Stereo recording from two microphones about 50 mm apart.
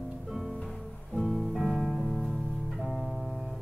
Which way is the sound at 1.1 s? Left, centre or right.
Centre.